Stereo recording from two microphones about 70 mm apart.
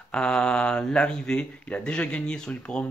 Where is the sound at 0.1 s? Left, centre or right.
Centre.